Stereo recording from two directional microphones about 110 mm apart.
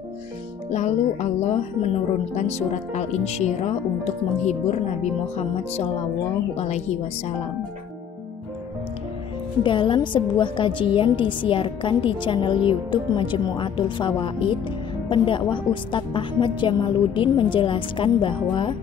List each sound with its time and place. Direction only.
0.7 s a woman's voice: 90° left
9.6 s a woman's voice: 50° left (ahead or behind)